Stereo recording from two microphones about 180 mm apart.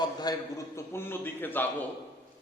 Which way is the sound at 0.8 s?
15° left (ahead or behind).